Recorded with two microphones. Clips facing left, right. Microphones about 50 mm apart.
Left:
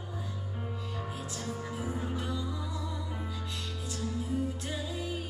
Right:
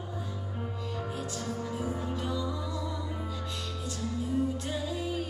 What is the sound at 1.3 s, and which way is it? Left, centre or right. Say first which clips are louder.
Music: right 1 dB; centre.